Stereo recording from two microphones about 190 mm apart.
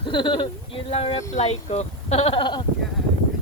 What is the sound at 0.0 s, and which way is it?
Speech, 25° left (ahead or behind).